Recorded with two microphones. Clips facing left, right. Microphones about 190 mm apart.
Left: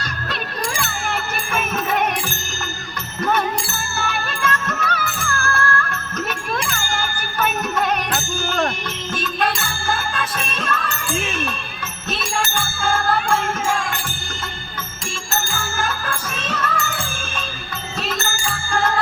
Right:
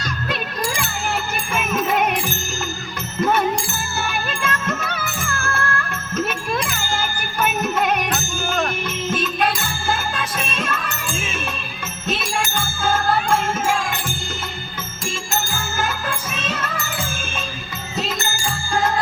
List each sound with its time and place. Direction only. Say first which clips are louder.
3.2 s music: right 1 dB; 15° right (ahead or behind)
9.1 s music: even; 20° right (ahead or behind)
13.3 s music: right 1 dB; 20° right (ahead or behind)
15.8 s music: right 1 dB; 15° right (ahead or behind)